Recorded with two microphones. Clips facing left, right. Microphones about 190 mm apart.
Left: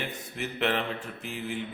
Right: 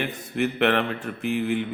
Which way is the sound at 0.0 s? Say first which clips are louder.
Right 9 dB; 65° right (ahead or behind).